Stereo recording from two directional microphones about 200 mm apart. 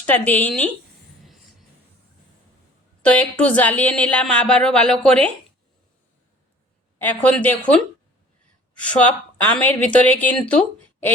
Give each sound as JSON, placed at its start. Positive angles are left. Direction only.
{"t": 0.0, "sound": "speech", "side_deg": 10}
{"t": 3.0, "sound": "speech", "side_deg": 5}
{"t": 7.0, "sound": "speech", "side_deg": 10}
{"t": 8.8, "sound": "speech", "side_deg": 5}